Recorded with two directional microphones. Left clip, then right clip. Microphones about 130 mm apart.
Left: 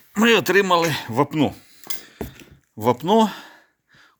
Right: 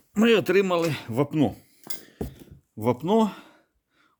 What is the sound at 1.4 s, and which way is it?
Dishes, 25° right (ahead or behind).